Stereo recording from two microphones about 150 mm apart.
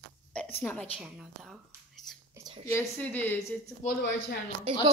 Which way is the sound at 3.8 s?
50° left (ahead or behind).